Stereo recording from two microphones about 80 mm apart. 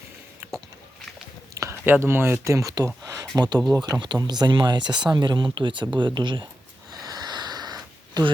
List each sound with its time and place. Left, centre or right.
1.8 s speech: right
2.7 s a sound: right
3.3 s speech: right
3.6 s speech: centre
4.2 s speech: right
6.0 s speech: right
7.0 s sniff: right